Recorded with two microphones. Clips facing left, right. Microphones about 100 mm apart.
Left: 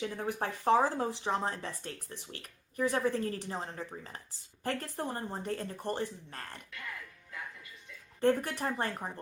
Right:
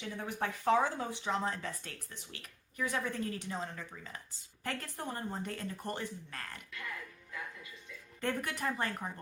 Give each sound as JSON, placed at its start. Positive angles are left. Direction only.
{"t": 0.0, "sound": "speech", "side_deg": 40}
{"t": 8.2, "sound": "speech", "side_deg": 35}